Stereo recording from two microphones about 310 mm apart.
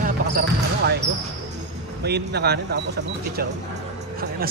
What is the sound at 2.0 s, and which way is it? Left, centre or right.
Speech, right.